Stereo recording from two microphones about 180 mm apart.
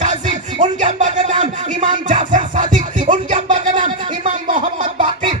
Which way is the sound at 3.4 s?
45° right (ahead or behind).